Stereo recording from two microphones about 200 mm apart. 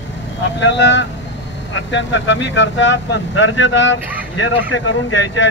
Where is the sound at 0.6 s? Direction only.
65° left (ahead or behind).